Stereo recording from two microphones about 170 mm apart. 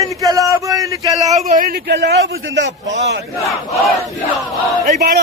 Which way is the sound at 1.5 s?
55° right (ahead or behind).